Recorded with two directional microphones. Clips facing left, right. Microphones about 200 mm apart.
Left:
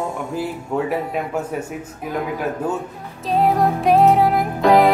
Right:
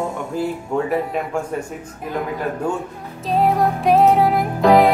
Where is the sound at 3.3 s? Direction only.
Centre (ahead or behind).